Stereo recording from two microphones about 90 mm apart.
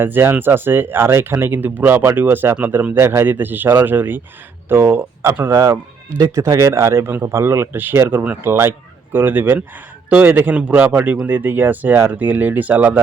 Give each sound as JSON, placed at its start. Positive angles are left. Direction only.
{"t": 0.0, "sound": "speech", "side_deg": -25}
{"t": 8.4, "sound": "speech", "side_deg": -25}